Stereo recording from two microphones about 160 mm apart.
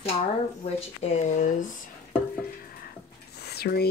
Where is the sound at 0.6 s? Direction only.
40° left (ahead or behind).